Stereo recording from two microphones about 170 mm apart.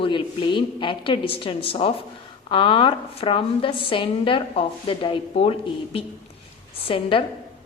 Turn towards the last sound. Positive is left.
turn(degrees=30)  # may be behind; listen again after turning